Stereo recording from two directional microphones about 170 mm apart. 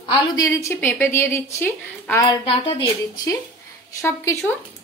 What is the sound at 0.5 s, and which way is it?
A woman's voice, 15° left (ahead or behind).